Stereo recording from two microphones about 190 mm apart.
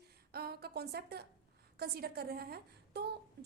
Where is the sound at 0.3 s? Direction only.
55° right (ahead or behind).